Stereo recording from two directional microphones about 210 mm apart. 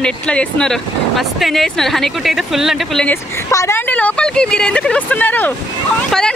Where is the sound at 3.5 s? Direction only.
15° left (ahead or behind).